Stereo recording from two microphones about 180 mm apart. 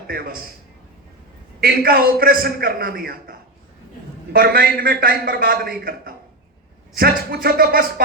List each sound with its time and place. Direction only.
0.1 s a man's voice: 55° right (ahead or behind)
1.6 s a man's voice: 55° right (ahead or behind)